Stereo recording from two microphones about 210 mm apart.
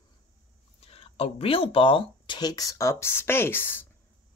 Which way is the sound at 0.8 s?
30° left (ahead or behind).